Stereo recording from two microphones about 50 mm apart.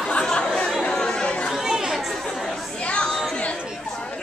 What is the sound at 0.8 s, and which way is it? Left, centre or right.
Chatter, centre.